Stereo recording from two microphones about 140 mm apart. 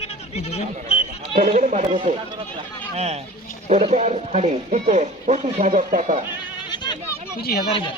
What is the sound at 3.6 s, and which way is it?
Speech, 55° right (ahead or behind).